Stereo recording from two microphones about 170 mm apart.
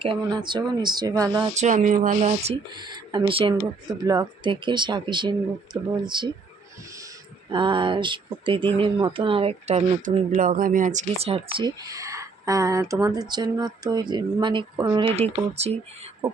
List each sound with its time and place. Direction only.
0.0 s speech: 30° right (ahead or behind)
1.5 s speech: 45° right (ahead or behind)
2.7 s speech: 25° right (ahead or behind)
7.5 s speech: 30° right (ahead or behind)
11.9 s speech: 20° right (ahead or behind)
15.1 s speech: 40° right (ahead or behind)